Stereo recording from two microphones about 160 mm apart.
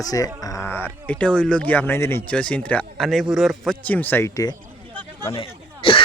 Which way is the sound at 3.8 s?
10° left (ahead or behind).